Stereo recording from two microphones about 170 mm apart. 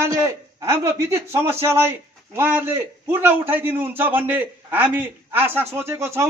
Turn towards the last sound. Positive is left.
turn(degrees=-15)  # may be behind; listen again after turning